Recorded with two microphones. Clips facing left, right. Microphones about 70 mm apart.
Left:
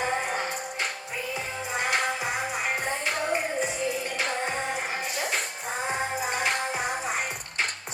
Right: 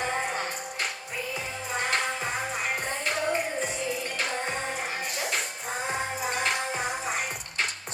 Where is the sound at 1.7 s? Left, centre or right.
Centre.